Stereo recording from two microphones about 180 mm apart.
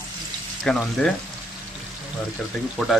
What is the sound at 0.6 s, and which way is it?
Speech, centre (ahead or behind).